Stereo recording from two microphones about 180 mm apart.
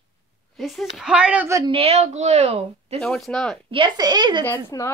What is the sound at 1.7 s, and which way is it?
Speech, 35° right (ahead or behind).